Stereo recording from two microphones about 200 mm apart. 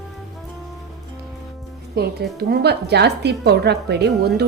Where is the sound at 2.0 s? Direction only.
50° right (ahead or behind).